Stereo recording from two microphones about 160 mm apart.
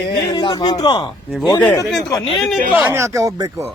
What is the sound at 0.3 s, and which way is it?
Speech, 25° left (ahead or behind).